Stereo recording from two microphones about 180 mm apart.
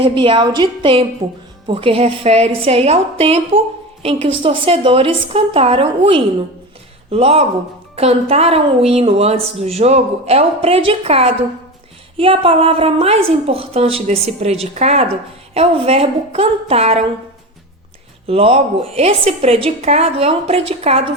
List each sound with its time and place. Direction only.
0.0 s a woman's voice: 30° right (ahead or behind)
18.3 s a woman's voice: 30° right (ahead or behind)